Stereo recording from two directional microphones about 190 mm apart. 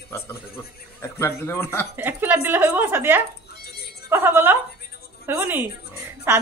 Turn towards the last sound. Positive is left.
turn(degrees=-10)  # may be behind; listen again after turning